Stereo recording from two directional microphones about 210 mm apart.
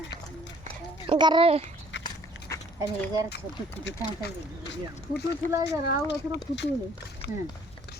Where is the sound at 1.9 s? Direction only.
55° left (ahead or behind).